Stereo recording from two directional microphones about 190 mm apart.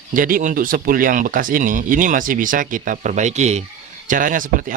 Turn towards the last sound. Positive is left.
turn(degrees=-45)  # may be behind; listen again after turning